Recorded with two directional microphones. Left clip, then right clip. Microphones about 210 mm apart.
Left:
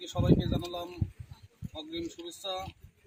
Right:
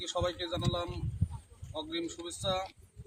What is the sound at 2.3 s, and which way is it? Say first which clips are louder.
Speech: right 5 dB; 5° right (ahead or behind).